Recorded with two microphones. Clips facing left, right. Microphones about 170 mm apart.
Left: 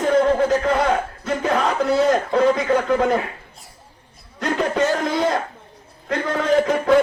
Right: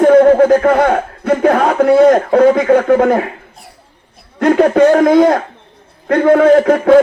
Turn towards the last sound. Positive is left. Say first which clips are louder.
# right 8 dB
turn(degrees=-60)  # may be behind; listen again after turning